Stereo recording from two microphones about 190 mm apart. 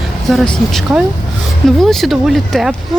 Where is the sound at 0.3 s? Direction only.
Centre (ahead or behind).